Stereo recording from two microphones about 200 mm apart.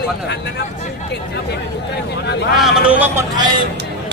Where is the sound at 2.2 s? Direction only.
60° left (ahead or behind).